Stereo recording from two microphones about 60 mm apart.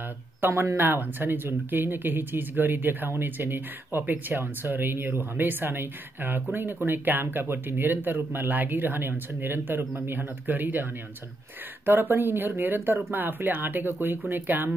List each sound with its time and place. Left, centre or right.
0.5 s speech: right
0.7 s speech: right